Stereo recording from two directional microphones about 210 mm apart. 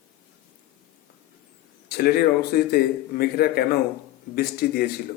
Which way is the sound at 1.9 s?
45° left (ahead or behind).